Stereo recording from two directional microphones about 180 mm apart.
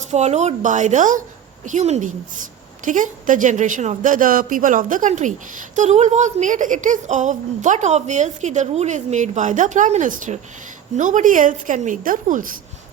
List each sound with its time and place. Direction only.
0.1 s a woman's voice: 40° right (ahead or behind)